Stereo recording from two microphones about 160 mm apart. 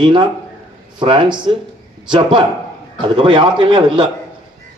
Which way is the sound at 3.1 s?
30° right (ahead or behind).